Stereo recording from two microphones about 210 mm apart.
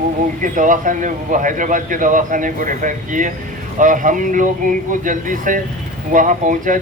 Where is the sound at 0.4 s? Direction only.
40° right (ahead or behind).